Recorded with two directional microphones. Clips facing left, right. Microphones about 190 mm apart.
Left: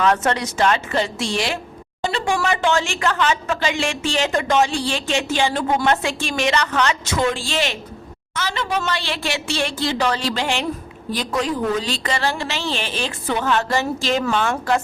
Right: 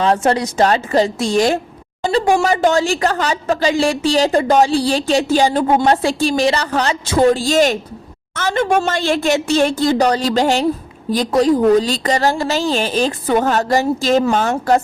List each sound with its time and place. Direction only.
0.0 s a woman's voice: 30° right (ahead or behind)